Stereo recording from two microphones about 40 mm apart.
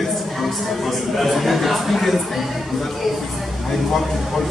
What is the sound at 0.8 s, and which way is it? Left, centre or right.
Speech, centre.